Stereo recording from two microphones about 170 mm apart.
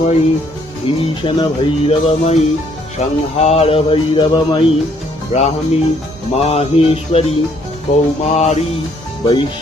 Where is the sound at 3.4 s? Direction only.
40° left (ahead or behind).